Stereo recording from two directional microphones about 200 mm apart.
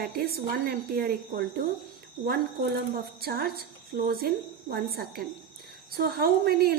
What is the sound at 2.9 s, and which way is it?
A woman's voice, 50° right (ahead or behind).